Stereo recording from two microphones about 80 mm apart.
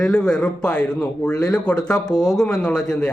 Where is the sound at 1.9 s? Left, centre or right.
Left.